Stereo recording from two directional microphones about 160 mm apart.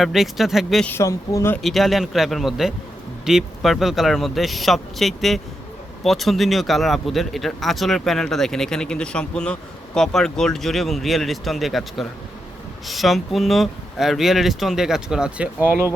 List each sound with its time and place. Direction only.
0.0 s speech: centre (ahead or behind)
0.9 s speech: 15° left (ahead or behind)
1.6 s speech: centre (ahead or behind)